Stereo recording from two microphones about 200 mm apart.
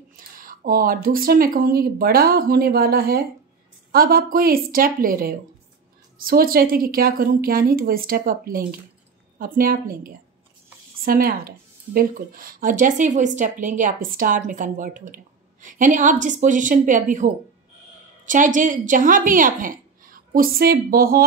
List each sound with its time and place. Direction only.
0.1 s a woman's voice: 45° right (ahead or behind)